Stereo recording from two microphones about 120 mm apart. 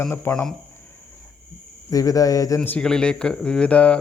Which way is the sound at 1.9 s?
30° left (ahead or behind).